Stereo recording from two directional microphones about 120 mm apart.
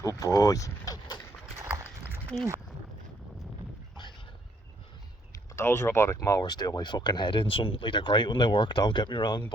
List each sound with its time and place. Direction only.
0.0 s mechanisms: 30° left (ahead or behind)
1.5 s a sound: 20° right (ahead or behind)
5.5 s speech: 20° left (ahead or behind); by 9.4 s 40° left (ahead or behind)